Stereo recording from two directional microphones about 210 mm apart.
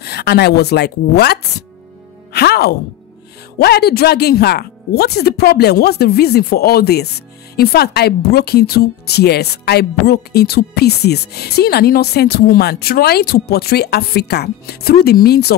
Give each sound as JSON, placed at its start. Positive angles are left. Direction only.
{"t": 0.0, "sound": "speech", "side_deg": 50}